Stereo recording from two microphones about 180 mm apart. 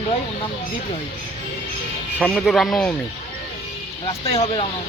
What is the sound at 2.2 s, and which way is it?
Speech, centre (ahead or behind).